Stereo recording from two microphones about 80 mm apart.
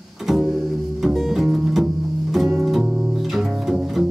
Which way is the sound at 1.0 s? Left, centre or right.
Centre.